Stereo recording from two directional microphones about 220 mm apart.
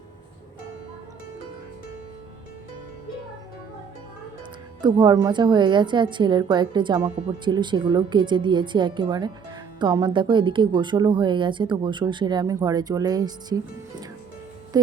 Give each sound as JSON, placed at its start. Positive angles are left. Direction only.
{"t": 4.8, "sound": "a woman's voice", "side_deg": -20}